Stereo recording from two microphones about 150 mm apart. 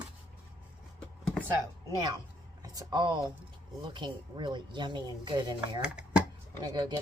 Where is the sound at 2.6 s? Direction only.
25° right (ahead or behind).